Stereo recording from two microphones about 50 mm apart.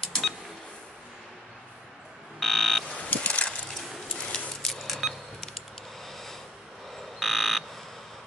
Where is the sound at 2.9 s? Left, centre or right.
Left.